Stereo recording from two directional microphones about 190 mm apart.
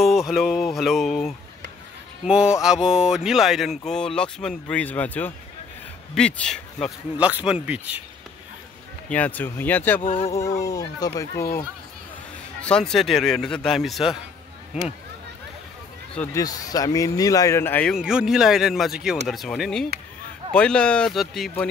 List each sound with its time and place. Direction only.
0.3 s speech: centre (ahead or behind)
9.1 s speech: 10° left (ahead or behind)
10.0 s a sound: 30° left (ahead or behind)
10.6 s speech: 20° left (ahead or behind)
12.6 s speech: 5° left (ahead or behind)
16.2 s speech: 20° left (ahead or behind)
17.9 s speech: 5° right (ahead or behind)